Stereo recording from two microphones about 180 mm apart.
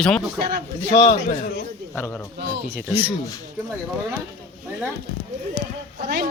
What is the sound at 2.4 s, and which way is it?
Speech, 70° right (ahead or behind).